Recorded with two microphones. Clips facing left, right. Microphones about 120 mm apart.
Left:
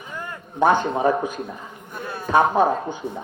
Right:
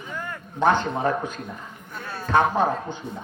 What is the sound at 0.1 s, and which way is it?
A man's voice, 15° left (ahead or behind).